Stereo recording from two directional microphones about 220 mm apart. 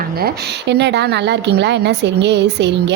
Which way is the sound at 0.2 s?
45° right (ahead or behind).